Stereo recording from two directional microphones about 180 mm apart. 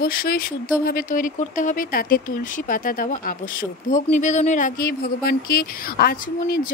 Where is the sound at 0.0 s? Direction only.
55° left (ahead or behind).